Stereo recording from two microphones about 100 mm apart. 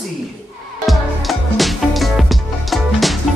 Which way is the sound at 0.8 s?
Centre (ahead or behind).